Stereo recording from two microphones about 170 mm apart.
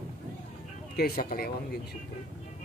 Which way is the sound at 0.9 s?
65° left (ahead or behind).